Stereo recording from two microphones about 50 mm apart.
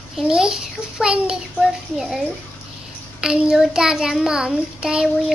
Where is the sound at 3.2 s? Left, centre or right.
Centre.